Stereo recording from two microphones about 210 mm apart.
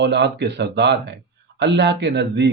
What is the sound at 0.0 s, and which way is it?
Speech, 55° right (ahead or behind).